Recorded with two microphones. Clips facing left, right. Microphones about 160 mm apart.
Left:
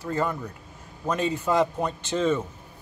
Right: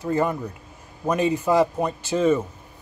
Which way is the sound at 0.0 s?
15° right (ahead or behind).